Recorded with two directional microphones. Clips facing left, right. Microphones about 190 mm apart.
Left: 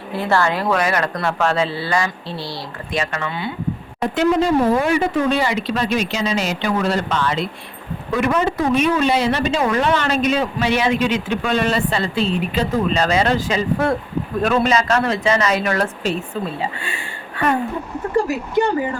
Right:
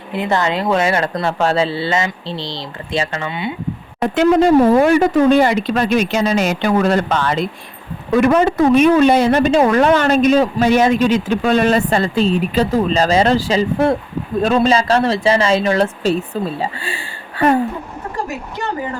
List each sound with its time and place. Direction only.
0.1 s a woman's voice: 20° right (ahead or behind)
4.1 s a woman's voice: 55° right (ahead or behind); by 17.5 s 35° right (ahead or behind)